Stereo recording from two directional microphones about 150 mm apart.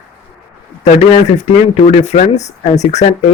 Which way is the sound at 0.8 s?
50° left (ahead or behind).